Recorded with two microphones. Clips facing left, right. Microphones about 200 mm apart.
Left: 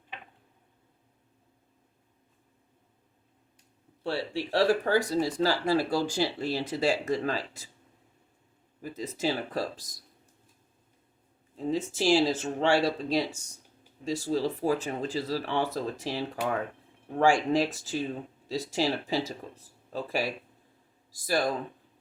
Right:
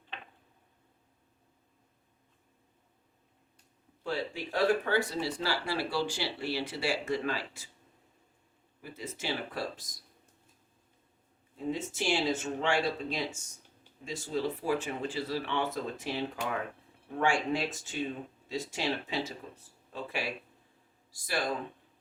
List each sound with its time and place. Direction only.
4.5 s speech: 35° left (ahead or behind)
9.0 s speech: 40° left (ahead or behind)
11.5 s speech: 35° left (ahead or behind)